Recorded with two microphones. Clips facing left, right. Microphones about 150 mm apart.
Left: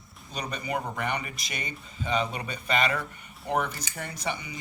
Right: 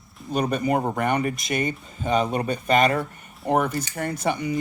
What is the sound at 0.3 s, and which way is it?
Speech, 50° right (ahead or behind).